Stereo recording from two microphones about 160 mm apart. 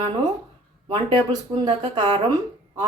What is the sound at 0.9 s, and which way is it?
A woman's voice, 30° right (ahead or behind).